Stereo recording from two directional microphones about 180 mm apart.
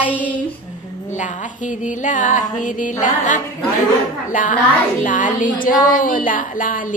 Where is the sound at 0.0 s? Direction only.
10° right (ahead or behind).